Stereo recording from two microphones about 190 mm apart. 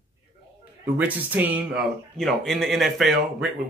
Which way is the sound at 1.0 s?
10° right (ahead or behind).